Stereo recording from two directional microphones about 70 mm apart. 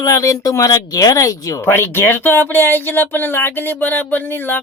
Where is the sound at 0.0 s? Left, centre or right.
Left.